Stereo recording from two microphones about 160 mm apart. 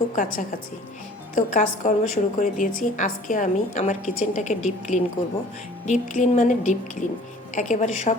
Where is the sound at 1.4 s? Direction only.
50° left (ahead or behind).